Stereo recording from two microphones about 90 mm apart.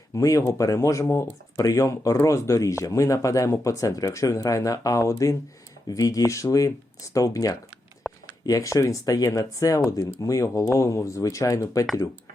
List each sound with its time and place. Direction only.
0.1 s speech: 40° left (ahead or behind)
8.0 s a sound: centre (ahead or behind)
8.4 s speech: 40° left (ahead or behind)